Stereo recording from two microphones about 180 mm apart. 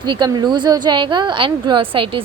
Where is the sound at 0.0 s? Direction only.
25° right (ahead or behind).